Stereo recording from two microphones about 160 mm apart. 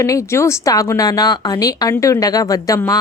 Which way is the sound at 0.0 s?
20° left (ahead or behind).